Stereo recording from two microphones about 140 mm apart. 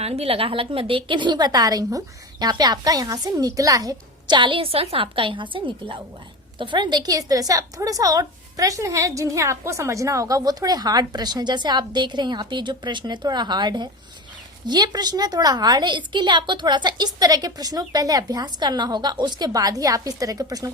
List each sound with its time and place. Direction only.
0.0 s a woman's voice: 45° right (ahead or behind); by 20.7 s 25° right (ahead or behind)